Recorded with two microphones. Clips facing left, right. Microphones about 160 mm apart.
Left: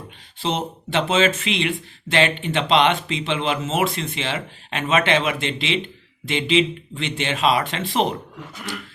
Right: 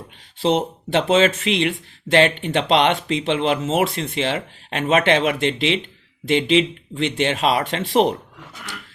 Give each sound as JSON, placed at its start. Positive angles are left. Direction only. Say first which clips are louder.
{"t": 0.4, "sound": "speech", "louder": "right 6 dB", "side_deg": -55}